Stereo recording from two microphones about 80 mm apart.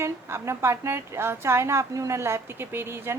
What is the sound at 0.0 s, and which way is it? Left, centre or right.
A woman's voice, right.